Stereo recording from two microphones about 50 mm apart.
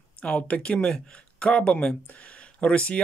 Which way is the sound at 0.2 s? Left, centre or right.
Left.